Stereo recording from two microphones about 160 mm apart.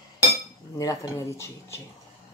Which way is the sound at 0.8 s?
20° left (ahead or behind).